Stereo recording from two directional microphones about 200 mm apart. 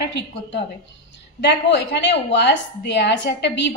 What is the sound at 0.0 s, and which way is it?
A woman's voice, 60° left (ahead or behind).